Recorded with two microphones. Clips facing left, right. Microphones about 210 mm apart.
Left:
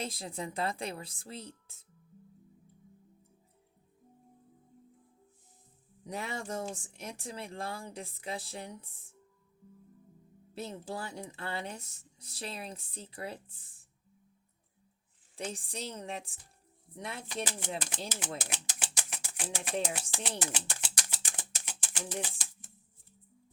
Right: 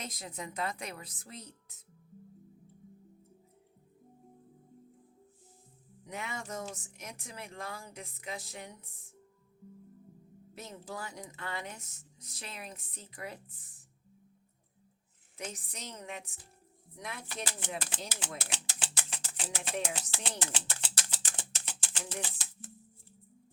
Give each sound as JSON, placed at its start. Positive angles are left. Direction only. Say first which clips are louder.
{"t": 0.0, "sound": "a woman's voice", "louder": "left 4 dB", "side_deg": 30}
{"t": 6.1, "sound": "speech", "louder": "left 3 dB", "side_deg": 35}
{"t": 10.5, "sound": "speech", "louder": "left 4 dB", "side_deg": 30}
{"t": 15.4, "sound": "a woman's voice", "louder": "left 4 dB", "side_deg": 30}
{"t": 17.2, "sound": "speech", "louder": "left 5 dB", "side_deg": 15}
{"t": 18.3, "sound": "typewriter", "louder": "left 3 dB", "side_deg": 15}
{"t": 19.8, "sound": "speech", "louder": "left 2 dB", "side_deg": 15}
{"t": 20.4, "sound": "a sound", "louder": "left 1 dB", "side_deg": 15}